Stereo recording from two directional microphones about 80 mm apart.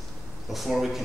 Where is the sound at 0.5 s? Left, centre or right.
Centre.